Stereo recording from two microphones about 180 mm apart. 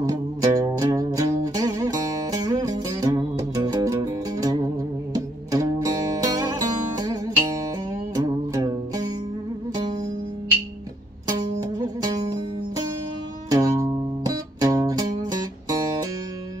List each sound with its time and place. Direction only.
0.0 s music: 20° right (ahead or behind)
11.8 s music: 20° right (ahead or behind)